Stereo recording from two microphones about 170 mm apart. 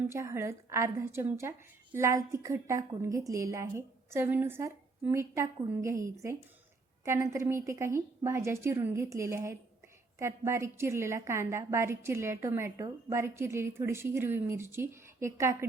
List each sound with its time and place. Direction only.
0.0 s a woman's voice: 15° right (ahead or behind)